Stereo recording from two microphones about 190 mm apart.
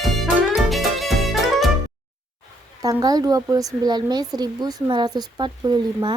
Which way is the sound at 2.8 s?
20° right (ahead or behind).